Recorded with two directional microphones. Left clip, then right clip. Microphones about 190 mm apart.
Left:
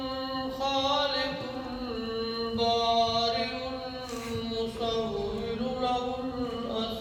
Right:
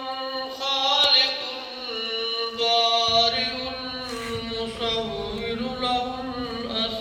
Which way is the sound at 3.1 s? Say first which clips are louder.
Right 7 dB; 60° left (ahead or behind).